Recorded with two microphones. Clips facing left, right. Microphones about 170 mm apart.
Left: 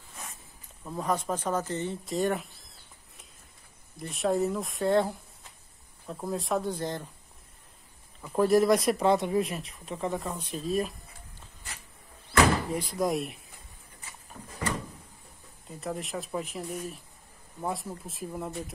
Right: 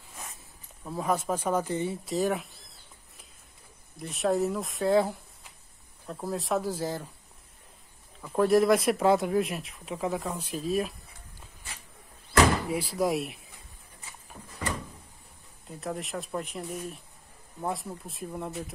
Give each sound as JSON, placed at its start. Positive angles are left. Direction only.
{"t": 0.8, "sound": "speech", "side_deg": -5}
{"t": 3.9, "sound": "speech", "side_deg": 0}
{"t": 8.2, "sound": "speech", "side_deg": 0}
{"t": 12.6, "sound": "speech", "side_deg": -5}
{"t": 15.7, "sound": "speech", "side_deg": 0}